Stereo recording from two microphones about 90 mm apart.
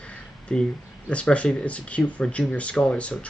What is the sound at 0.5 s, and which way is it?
Speech, 10° left (ahead or behind).